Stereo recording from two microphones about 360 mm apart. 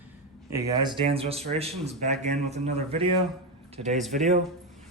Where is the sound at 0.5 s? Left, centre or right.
Centre.